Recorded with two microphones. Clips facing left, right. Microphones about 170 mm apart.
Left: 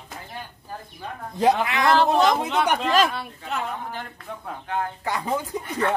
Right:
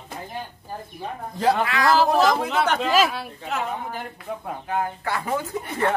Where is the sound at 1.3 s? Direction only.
20° left (ahead or behind).